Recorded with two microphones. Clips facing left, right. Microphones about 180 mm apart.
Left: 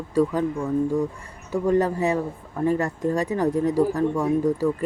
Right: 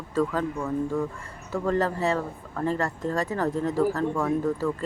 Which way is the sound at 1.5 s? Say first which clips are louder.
Left 4 dB; 15° left (ahead or behind).